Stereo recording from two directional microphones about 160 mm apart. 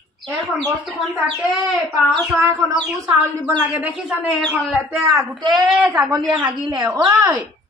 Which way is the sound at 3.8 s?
10° right (ahead or behind).